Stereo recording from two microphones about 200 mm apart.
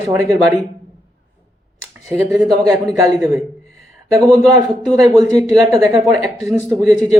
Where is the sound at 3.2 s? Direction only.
Centre (ahead or behind).